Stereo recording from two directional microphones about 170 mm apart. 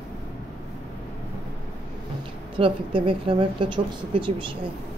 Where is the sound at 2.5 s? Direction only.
30° right (ahead or behind).